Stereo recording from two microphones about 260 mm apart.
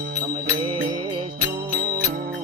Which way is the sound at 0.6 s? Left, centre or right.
Right.